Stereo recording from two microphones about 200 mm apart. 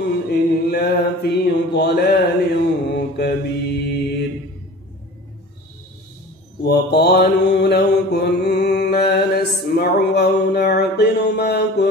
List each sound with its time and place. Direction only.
0.3 s mantra: 55° left (ahead or behind)
6.6 s mantra: 55° left (ahead or behind)